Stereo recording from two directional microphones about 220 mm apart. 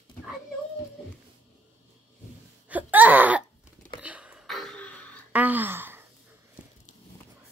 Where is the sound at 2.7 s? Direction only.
5° right (ahead or behind).